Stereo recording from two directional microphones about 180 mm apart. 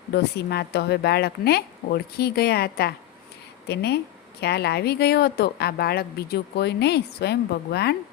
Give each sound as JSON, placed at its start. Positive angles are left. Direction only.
{"t": 0.1, "sound": "a woman's voice", "side_deg": 65}